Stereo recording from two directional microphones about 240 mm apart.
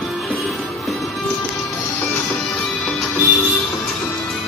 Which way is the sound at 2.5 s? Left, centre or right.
Centre.